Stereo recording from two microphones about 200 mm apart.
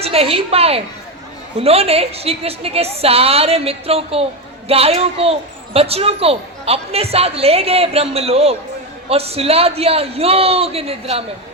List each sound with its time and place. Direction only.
0.0 s a woman's voice: 30° right (ahead or behind)